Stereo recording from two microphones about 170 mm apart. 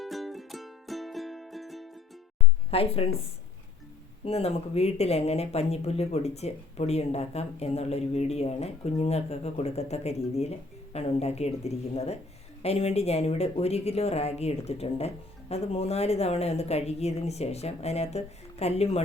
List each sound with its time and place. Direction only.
0.0 s music: centre (ahead or behind)
2.6 s speech: 35° left (ahead or behind)
4.3 s speech: 35° left (ahead or behind)